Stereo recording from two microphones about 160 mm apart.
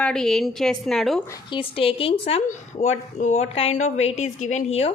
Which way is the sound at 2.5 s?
45° left (ahead or behind).